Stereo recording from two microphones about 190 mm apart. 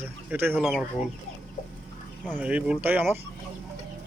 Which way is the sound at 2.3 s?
10° right (ahead or behind).